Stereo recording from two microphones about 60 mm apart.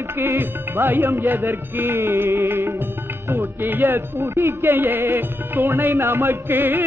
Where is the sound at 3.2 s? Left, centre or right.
Right.